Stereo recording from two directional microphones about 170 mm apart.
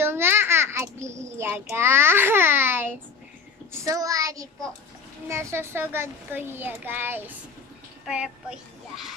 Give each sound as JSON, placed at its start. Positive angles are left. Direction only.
{"t": 0.0, "sound": "a child's voice", "side_deg": -15}
{"t": 3.7, "sound": "child singing", "side_deg": -15}
{"t": 5.3, "sound": "a child's voice", "side_deg": -15}